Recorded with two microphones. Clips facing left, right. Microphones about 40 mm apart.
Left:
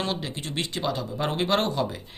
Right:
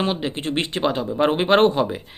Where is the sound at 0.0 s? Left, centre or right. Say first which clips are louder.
Right 7 dB; right.